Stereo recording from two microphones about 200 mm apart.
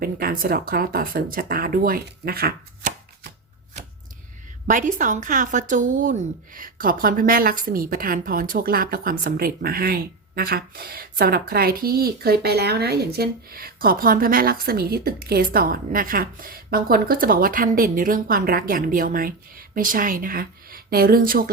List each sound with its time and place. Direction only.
0.0 s speech: 45° right (ahead or behind)
4.7 s speech: 40° right (ahead or behind)